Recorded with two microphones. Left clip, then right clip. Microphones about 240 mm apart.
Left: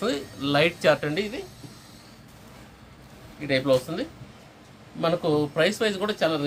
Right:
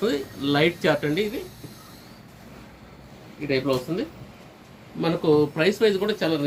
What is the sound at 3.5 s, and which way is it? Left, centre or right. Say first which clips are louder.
Speech: left 2 dB; left.